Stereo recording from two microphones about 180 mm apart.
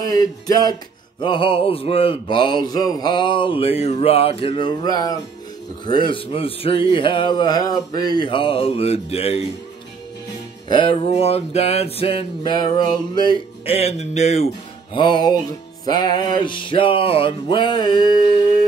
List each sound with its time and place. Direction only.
0.1 s mantra: 20° left (ahead or behind)
10.7 s a sound: 30° left (ahead or behind)
15.0 s mantra: 25° left (ahead or behind)